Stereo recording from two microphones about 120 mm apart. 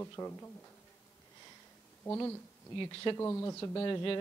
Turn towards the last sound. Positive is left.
turn(degrees=40)  # may be behind; listen again after turning